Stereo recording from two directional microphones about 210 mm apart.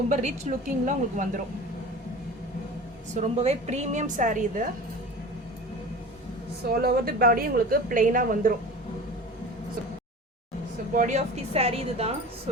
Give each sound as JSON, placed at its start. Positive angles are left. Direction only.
{"t": 0.1, "sound": "a woman's voice", "side_deg": -35}
{"t": 3.2, "sound": "a woman's voice", "side_deg": -30}
{"t": 6.8, "sound": "a woman's voice", "side_deg": -45}
{"t": 10.9, "sound": "speech", "side_deg": -35}